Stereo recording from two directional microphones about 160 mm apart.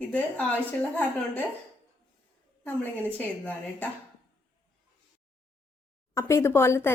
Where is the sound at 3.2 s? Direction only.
10° left (ahead or behind).